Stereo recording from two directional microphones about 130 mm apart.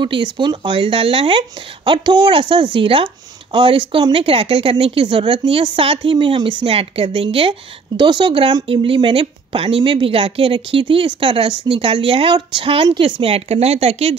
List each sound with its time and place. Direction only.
0.0 s speech: 35° right (ahead or behind)